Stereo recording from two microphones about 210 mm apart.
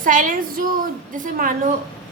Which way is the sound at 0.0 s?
40° right (ahead or behind).